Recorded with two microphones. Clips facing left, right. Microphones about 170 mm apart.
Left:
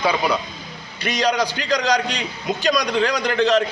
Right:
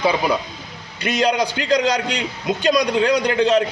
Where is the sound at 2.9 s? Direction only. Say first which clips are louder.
Right 3 dB; 15° right (ahead or behind).